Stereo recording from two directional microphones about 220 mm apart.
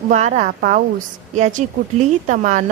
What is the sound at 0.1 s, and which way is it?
A woman's voice, 35° right (ahead or behind).